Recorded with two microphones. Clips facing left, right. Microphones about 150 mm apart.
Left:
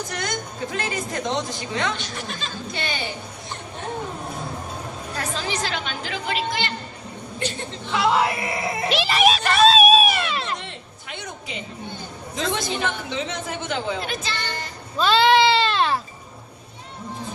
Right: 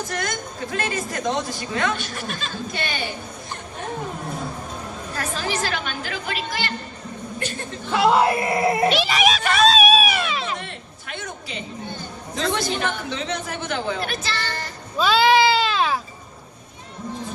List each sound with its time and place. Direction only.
0.1 s a woman's voice: 20° left (ahead or behind)
5.1 s a woman's voice: 20° left (ahead or behind)
7.9 s speech: 50° right (ahead or behind)
8.9 s a sound: centre (ahead or behind)
10.6 s a sound: 20° left (ahead or behind)
12.4 s a woman's voice: 20° left (ahead or behind)
14.9 s sheep: 5° right (ahead or behind)